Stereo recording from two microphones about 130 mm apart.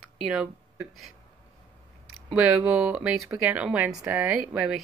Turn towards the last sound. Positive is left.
turn(degrees=-5)  # may be behind; listen again after turning